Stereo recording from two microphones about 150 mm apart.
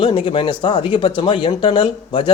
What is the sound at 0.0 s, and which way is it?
Speech, 35° left (ahead or behind).